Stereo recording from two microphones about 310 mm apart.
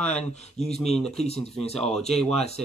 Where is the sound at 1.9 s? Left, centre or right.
Centre.